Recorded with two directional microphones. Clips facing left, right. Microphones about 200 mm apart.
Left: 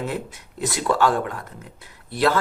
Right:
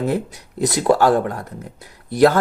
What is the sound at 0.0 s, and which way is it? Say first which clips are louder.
Speech: right 7 dB; 40° right (ahead or behind).